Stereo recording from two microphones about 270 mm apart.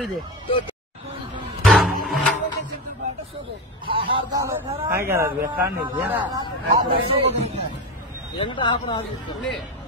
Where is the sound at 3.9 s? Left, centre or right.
Centre.